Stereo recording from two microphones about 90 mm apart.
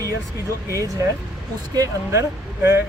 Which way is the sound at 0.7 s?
35° right (ahead or behind).